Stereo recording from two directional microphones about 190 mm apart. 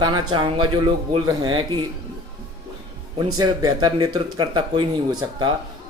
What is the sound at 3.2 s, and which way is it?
Speech, 20° right (ahead or behind).